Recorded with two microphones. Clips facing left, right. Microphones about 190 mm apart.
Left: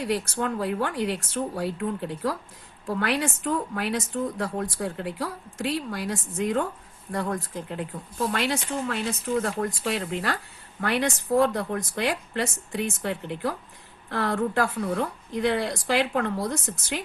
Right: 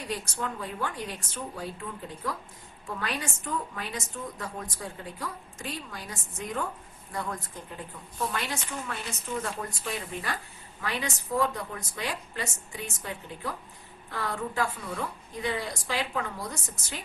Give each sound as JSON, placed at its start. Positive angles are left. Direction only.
{"t": 0.0, "sound": "a woman's voice", "side_deg": 70}
{"t": 10.8, "sound": "a woman's voice", "side_deg": 60}